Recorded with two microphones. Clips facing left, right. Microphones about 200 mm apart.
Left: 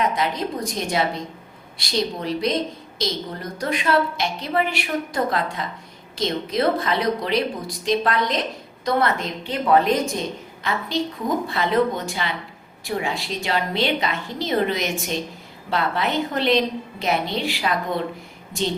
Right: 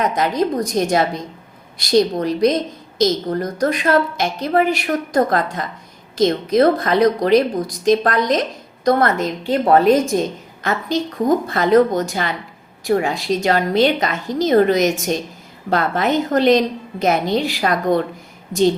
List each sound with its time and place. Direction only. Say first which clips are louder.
0.0 s a woman's voice: right 5 dB; 40° right (ahead or behind)